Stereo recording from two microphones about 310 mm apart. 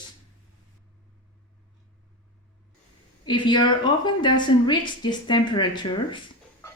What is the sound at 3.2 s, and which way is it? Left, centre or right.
A woman's voice, centre.